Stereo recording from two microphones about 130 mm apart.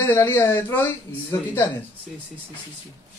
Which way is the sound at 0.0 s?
15° left (ahead or behind).